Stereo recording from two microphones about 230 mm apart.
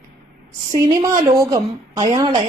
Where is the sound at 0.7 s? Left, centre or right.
Centre.